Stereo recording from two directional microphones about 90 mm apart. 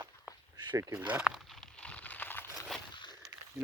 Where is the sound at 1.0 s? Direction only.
10° right (ahead or behind); by 2.5 s 20° left (ahead or behind).